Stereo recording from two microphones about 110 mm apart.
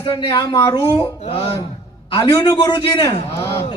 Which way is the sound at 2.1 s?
50° left (ahead or behind).